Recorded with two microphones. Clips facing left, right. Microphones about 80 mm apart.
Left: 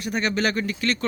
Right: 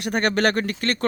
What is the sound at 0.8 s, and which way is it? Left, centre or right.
Speech, right.